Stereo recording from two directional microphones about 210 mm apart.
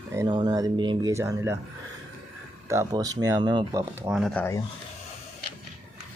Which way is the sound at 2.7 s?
15° right (ahead or behind).